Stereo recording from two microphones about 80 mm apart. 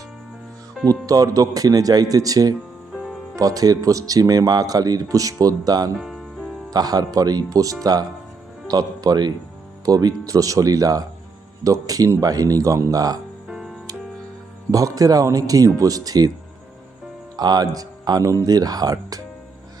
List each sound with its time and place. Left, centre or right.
1.0 s speech: right
2.9 s music: centre
3.3 s speech: right
6.0 s music: centre
6.7 s speech: right
9.8 s speech: right
13.5 s music: centre
14.7 s speech: right
17.3 s speech: right